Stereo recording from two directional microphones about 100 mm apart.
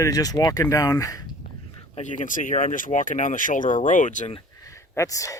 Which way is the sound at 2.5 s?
70° left (ahead or behind).